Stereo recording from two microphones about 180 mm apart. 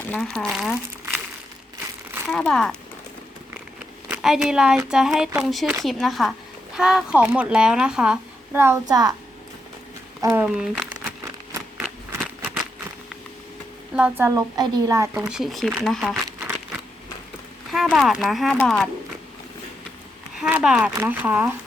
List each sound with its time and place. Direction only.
0.0 s speech: 5° left (ahead or behind)
2.3 s a woman's voice: 5° left (ahead or behind)
4.1 s a woman's voice: 5° right (ahead or behind); by 9.1 s 20° right (ahead or behind)
10.2 s speech: 10° right (ahead or behind)
11.8 s a sound: 5° right (ahead or behind)
13.9 s a woman's voice: 10° right (ahead or behind)
15.1 s a woman's voice: 5° right (ahead or behind)
17.7 s a woman's voice: centre (ahead or behind)
20.4 s a woman's voice: 5° right (ahead or behind)